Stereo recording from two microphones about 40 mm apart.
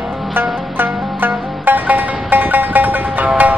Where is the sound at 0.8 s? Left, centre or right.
Right.